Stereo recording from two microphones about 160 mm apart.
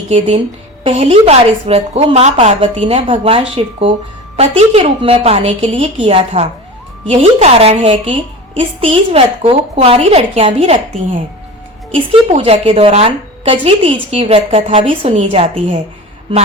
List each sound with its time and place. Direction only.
0.9 s a woman's voice: 40° right (ahead or behind)
12.4 s a woman's voice: 35° right (ahead or behind)